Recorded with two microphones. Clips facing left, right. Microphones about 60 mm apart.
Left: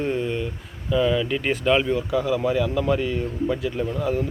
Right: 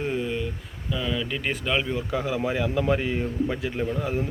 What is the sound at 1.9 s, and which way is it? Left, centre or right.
Speech, right.